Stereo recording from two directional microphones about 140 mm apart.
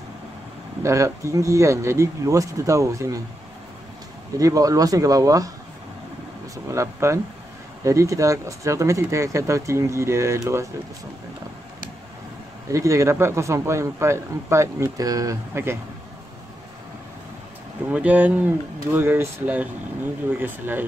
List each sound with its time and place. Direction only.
0.8 s speech: 20° right (ahead or behind)
4.4 s speech: 25° right (ahead or behind)
6.5 s speech: 20° right (ahead or behind)
12.7 s speech: 20° right (ahead or behind)
17.9 s speech: 10° right (ahead or behind)